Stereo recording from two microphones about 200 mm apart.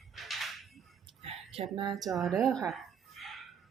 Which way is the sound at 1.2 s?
30° right (ahead or behind).